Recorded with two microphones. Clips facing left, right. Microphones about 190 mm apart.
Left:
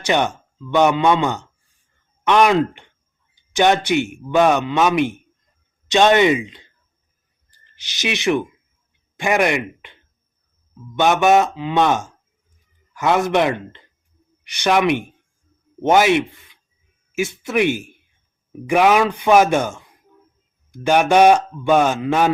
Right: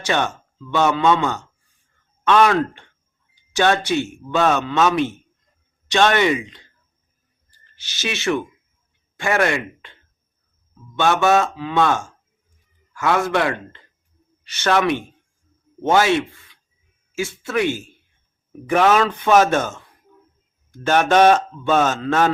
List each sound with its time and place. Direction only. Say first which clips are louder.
0.0 s a man's voice: left 3 dB; 15° left (ahead or behind)